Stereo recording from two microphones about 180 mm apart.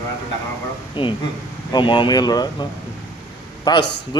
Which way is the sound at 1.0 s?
25° left (ahead or behind).